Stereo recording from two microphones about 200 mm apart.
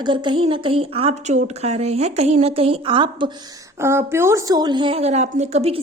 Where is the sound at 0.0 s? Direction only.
25° right (ahead or behind).